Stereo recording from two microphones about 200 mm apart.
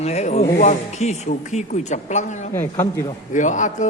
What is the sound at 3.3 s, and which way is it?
Speech, 40° left (ahead or behind).